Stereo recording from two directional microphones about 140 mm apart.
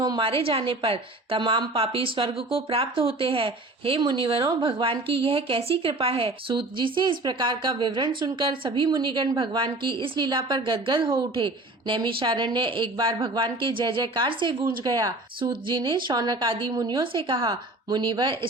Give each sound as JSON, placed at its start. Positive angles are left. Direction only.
{"t": 0.0, "sound": "a woman's voice", "side_deg": -35}